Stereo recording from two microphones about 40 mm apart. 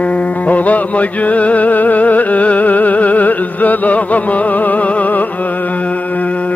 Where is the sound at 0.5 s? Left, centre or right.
Left.